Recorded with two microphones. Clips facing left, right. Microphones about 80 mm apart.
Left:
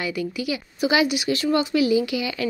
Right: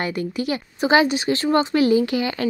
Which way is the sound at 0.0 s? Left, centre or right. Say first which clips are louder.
Right 2 dB; right.